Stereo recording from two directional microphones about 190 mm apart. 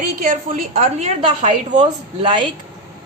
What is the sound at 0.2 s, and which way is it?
Speech, 50° right (ahead or behind).